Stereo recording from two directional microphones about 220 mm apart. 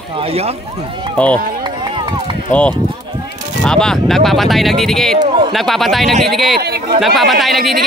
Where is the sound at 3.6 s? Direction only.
5° left (ahead or behind).